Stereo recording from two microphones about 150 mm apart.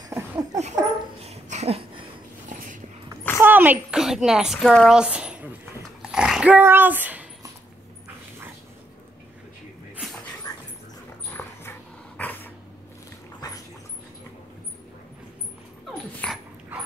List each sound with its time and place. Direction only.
0.1 s a sound: 25° right (ahead or behind)
1.2 s dog: 45° right (ahead or behind)
2.5 s a sound: 55° right (ahead or behind)
3.3 s a woman's voice: 10° right (ahead or behind)
6.1 s dog: 5° right (ahead or behind)
10.5 s dog: 25° left (ahead or behind)
13.4 s dog: 25° left (ahead or behind)
16.2 s dog: 5° left (ahead or behind)